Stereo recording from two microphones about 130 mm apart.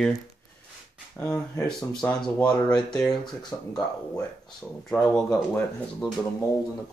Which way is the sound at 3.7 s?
30° left (ahead or behind).